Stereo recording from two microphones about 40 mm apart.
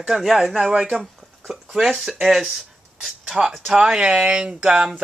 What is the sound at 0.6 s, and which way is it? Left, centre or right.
Speech, right.